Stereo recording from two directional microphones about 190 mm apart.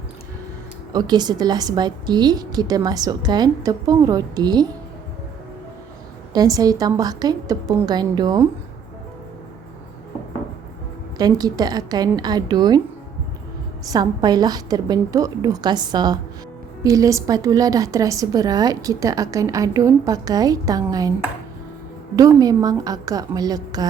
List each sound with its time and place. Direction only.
0.9 s a woman's voice: 20° right (ahead or behind)
6.3 s a woman's voice: 20° right (ahead or behind)
11.2 s a woman's voice: 20° right (ahead or behind)
13.9 s a woman's voice: 20° right (ahead or behind)